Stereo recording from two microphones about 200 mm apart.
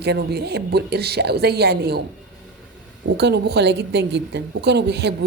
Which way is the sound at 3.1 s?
55° right (ahead or behind).